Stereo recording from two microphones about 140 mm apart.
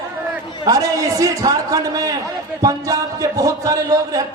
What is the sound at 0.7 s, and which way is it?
A man's voice, 25° right (ahead or behind).